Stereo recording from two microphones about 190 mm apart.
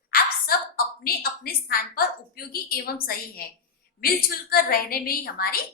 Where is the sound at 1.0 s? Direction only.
55° left (ahead or behind).